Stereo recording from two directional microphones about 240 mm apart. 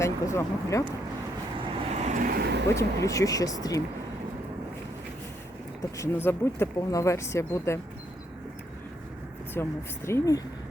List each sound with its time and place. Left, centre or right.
0.0 s speech: centre
1.5 s vehicle: right
2.7 s speech: centre
6.0 s speech: centre
9.6 s speech: centre